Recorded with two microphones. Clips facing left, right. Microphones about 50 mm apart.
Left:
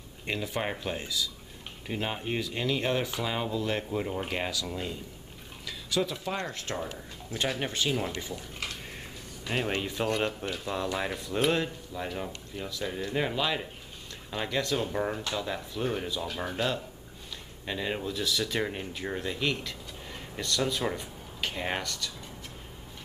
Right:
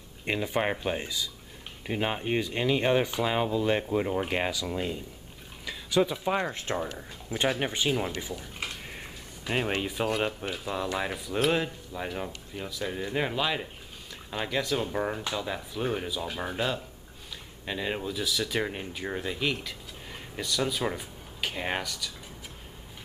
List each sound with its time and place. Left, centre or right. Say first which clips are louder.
0.2 s speech: right 4 dB; centre